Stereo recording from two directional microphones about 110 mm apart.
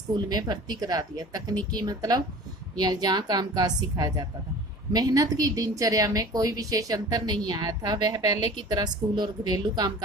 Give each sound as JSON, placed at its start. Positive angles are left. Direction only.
{"t": 0.1, "sound": "a woman's voice", "side_deg": -40}